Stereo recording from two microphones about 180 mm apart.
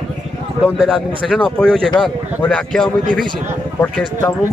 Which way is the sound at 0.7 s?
Centre (ahead or behind).